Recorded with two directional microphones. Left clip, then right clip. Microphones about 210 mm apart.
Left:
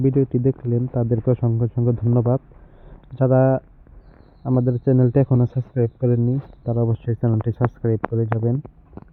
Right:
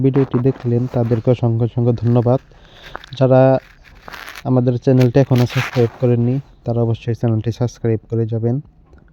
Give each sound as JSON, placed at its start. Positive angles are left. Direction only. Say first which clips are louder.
{"t": 0.0, "sound": "speech", "louder": "right 4 dB", "side_deg": -35}
{"t": 7.4, "sound": "speech", "louder": "right 2 dB", "side_deg": -65}